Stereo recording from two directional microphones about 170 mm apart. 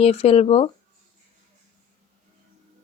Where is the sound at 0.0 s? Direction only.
35° left (ahead or behind).